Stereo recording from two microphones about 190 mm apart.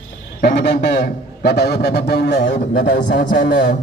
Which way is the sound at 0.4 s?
65° left (ahead or behind).